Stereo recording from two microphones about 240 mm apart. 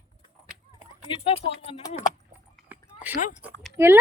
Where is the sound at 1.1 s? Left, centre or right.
Left.